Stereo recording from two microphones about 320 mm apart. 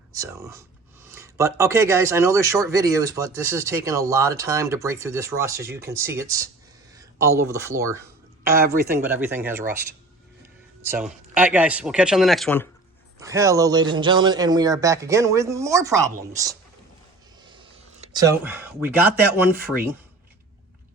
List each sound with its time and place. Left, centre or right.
0.1 s speech: centre
8.4 s speech: right
9.0 s speech: centre
10.8 s speech: centre
13.1 s speech: centre
17.4 s a sound: centre